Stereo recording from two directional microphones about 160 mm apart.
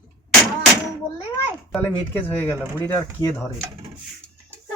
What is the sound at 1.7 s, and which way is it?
Speech, 10° left (ahead or behind).